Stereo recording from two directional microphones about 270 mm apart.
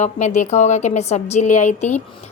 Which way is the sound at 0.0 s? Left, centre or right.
Left.